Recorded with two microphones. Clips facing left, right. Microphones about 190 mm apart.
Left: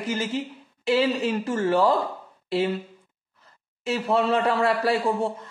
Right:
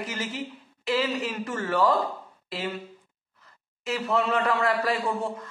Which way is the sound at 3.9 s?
30° left (ahead or behind).